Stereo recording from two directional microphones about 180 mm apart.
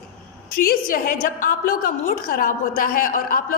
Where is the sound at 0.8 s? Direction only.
50° left (ahead or behind).